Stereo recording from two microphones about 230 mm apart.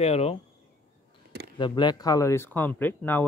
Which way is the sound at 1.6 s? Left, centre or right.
Centre.